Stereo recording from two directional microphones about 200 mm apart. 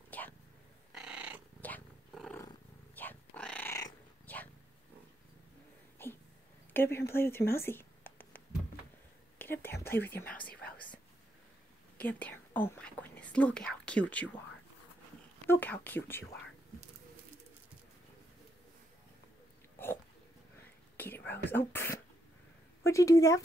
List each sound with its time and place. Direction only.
0.1 s a sound: 10° left (ahead or behind)
0.9 s cat: 5° right (ahead or behind)
1.6 s purr: 5° left (ahead or behind)
2.4 s cat: 10° left (ahead or behind)
6.0 s a sound: 10° left (ahead or behind)
7.1 s speech: 10° left (ahead or behind)
9.4 s whispering: 10° left (ahead or behind)
12.0 s speech: 10° left (ahead or behind)
15.4 s speech: 10° left (ahead or behind)
19.8 s a sound: 10° left (ahead or behind)
20.9 s whispering: 10° left (ahead or behind)
21.3 s speech: 10° left (ahead or behind)